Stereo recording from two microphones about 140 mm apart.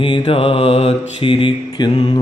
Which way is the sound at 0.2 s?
40° left (ahead or behind).